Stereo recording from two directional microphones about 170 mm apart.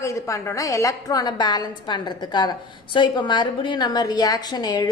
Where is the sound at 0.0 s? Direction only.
15° left (ahead or behind).